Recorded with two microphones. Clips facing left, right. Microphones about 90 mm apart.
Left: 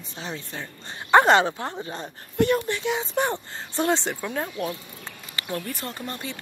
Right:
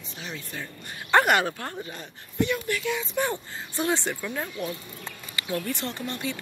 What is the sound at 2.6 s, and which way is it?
Speech, 25° left (ahead or behind).